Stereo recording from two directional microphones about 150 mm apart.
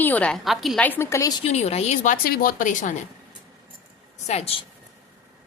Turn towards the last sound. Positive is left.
turn(degrees=45)  # may be behind; listen again after turning